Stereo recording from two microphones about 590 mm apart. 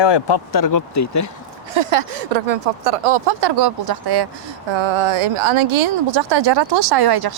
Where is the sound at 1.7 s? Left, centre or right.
Right.